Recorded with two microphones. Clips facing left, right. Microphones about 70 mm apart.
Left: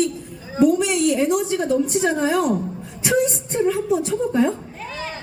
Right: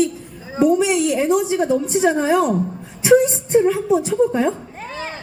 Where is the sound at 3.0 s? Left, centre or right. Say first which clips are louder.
Right 6 dB; right.